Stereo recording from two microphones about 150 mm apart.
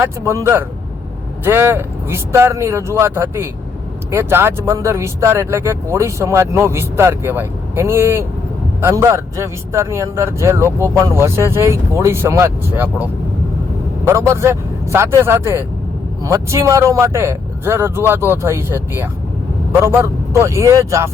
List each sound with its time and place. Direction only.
0.0 s speech: 20° right (ahead or behind)